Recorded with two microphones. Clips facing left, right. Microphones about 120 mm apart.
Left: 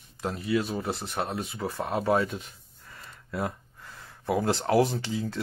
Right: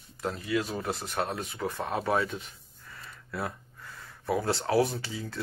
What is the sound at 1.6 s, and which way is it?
Speech, 10° left (ahead or behind).